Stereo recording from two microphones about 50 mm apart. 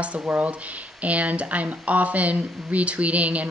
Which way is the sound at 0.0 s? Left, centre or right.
Right.